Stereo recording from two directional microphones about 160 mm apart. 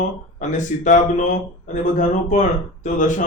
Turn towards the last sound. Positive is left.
turn(degrees=50)  # may be behind; listen again after turning